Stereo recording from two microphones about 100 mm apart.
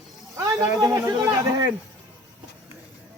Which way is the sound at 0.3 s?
35° right (ahead or behind).